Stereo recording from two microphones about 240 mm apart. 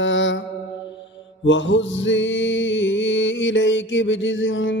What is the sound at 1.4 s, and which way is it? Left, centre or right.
Music, left.